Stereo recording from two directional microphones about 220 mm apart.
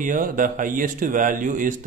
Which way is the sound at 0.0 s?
35° right (ahead or behind).